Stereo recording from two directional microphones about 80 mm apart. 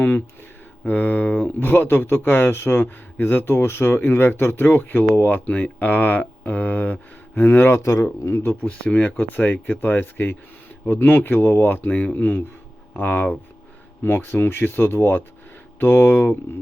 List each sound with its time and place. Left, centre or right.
0.9 s speech: left
8.6 s speech: centre